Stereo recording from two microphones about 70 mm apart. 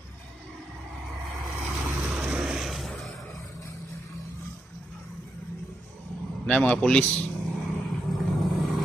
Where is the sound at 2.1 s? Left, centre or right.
Centre.